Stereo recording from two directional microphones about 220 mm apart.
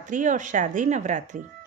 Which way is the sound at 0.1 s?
35° right (ahead or behind).